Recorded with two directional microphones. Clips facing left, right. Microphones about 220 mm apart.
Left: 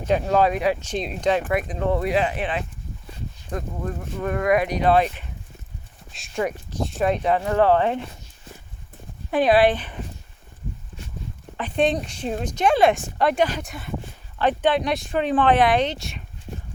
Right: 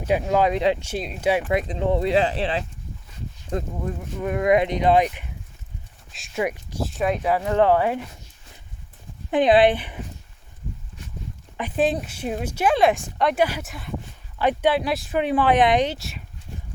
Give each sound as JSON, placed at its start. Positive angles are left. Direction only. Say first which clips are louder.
{"t": 0.0, "sound": "speech", "louder": "left 1 dB", "side_deg": -10}
{"t": 0.8, "sound": "speech", "louder": "left 2 dB", "side_deg": -5}
{"t": 1.5, "sound": "speech", "louder": "right 1 dB", "side_deg": -25}
{"t": 3.8, "sound": "speech", "louder": "even", "side_deg": -15}
{"t": 6.1, "sound": "speech", "louder": "even", "side_deg": 0}
{"t": 6.4, "sound": "speech", "louder": "even", "side_deg": -10}
{"t": 9.3, "sound": "speech", "louder": "right 1 dB", "side_deg": -20}
{"t": 11.8, "sound": "speech", "louder": "left 1 dB", "side_deg": -5}
{"t": 16.0, "sound": "speech", "louder": "left 1 dB", "side_deg": 0}